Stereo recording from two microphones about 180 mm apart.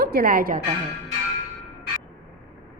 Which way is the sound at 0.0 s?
55° right (ahead or behind).